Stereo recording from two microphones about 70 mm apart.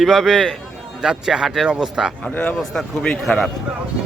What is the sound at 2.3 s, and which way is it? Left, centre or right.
Speech, left.